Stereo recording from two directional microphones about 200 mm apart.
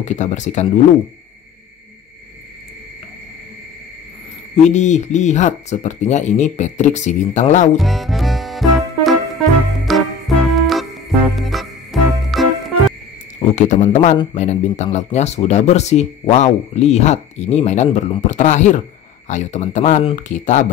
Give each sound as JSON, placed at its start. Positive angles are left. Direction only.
{"t": 0.0, "sound": "speech", "side_deg": 35}
{"t": 4.6, "sound": "speech", "side_deg": 35}
{"t": 7.7, "sound": "music", "side_deg": 0}
{"t": 13.4, "sound": "speech", "side_deg": 35}